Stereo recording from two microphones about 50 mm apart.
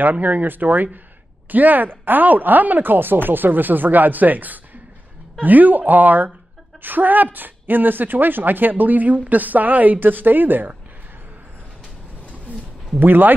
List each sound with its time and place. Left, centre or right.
0.0 s speech: right
13.0 s speech: right